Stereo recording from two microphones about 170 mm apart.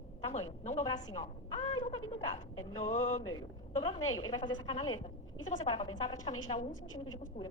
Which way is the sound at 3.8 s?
25° left (ahead or behind).